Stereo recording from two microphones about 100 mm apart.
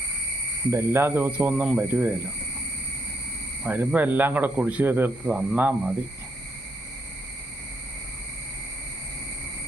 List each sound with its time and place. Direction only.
0.7 s a man's voice: 25° right (ahead or behind)
3.6 s a man's voice: 20° right (ahead or behind)